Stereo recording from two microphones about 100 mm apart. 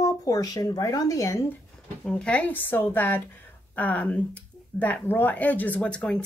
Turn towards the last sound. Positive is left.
turn(degrees=10)  # may be behind; listen again after turning